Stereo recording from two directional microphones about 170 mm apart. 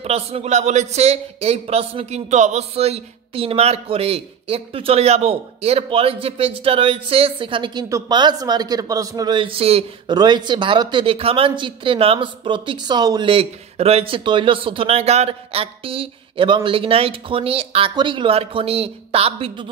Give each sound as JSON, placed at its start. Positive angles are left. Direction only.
{"t": 0.0, "sound": "a man's voice", "side_deg": -40}
{"t": 10.1, "sound": "speech", "side_deg": -25}